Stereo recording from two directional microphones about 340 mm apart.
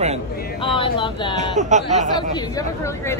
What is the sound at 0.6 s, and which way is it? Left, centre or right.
Speech, centre.